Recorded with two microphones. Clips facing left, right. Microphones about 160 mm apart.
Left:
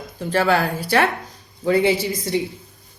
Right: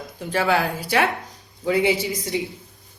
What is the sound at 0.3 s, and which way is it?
Speech, 15° right (ahead or behind).